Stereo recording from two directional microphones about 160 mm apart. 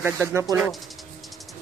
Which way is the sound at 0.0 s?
15° right (ahead or behind).